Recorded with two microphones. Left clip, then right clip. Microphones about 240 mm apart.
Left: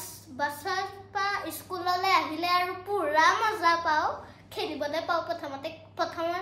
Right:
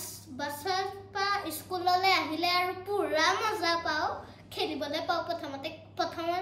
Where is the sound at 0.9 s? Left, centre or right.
Centre.